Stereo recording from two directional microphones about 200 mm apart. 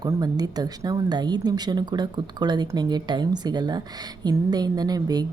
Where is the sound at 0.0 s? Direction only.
20° right (ahead or behind).